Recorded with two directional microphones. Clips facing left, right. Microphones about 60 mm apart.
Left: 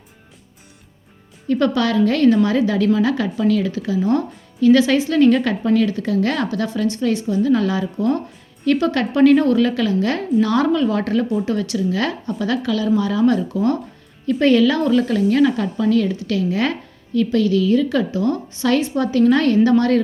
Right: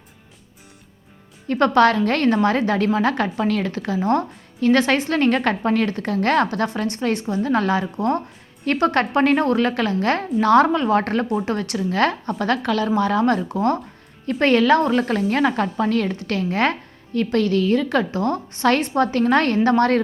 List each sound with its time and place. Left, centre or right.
1.5 s a woman's voice: right